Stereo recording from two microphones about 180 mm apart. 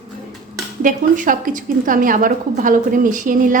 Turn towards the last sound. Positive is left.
turn(degrees=-45)  # may be behind; listen again after turning